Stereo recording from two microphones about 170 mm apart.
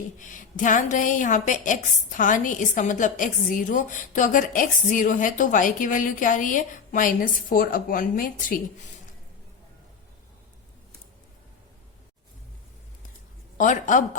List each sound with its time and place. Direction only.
0.2 s a woman's voice: 50° left (ahead or behind)
13.6 s a woman's voice: 50° left (ahead or behind)